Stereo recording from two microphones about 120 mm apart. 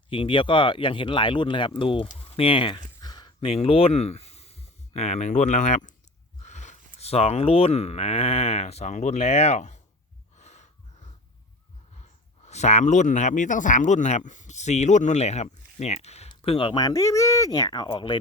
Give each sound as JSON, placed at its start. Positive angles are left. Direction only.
{"t": 0.1, "sound": "speech", "side_deg": 45}
{"t": 3.0, "sound": "a sound", "side_deg": 35}
{"t": 3.4, "sound": "speech", "side_deg": 50}
{"t": 10.3, "sound": "gasp", "side_deg": 70}
{"t": 12.5, "sound": "speech", "side_deg": 70}
{"t": 16.3, "sound": "speech", "side_deg": 50}
{"t": 16.8, "sound": "speech", "side_deg": 25}